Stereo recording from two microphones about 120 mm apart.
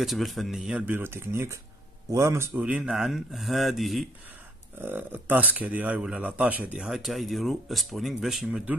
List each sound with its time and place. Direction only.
0.0 s speech: centre (ahead or behind); by 2.6 s 20° right (ahead or behind)
2.6 s speech: 10° right (ahead or behind)
4.7 s speech: 15° right (ahead or behind)